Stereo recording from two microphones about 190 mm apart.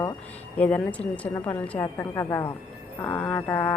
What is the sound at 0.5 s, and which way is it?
A woman's voice, 5° left (ahead or behind).